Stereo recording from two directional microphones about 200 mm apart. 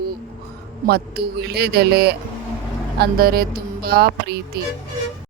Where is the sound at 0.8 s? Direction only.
50° right (ahead or behind).